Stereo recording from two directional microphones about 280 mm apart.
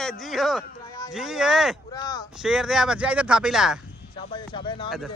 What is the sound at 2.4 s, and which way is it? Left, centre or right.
Speech, centre.